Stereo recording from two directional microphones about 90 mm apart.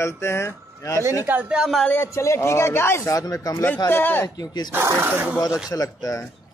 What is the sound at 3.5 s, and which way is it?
Speech, 25° left (ahead or behind).